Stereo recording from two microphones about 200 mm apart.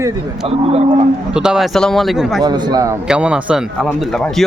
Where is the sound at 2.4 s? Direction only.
20° right (ahead or behind).